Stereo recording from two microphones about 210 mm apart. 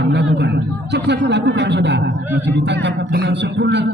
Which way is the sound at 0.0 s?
55° right (ahead or behind).